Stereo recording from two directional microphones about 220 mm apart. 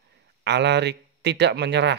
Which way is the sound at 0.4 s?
50° right (ahead or behind).